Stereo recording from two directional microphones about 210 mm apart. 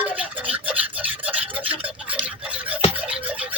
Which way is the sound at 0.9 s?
5° right (ahead or behind).